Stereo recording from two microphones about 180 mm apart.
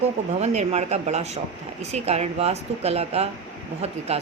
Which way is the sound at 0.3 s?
40° right (ahead or behind).